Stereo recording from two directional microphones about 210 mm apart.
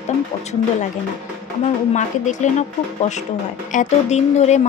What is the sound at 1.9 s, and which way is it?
Speech, 35° left (ahead or behind).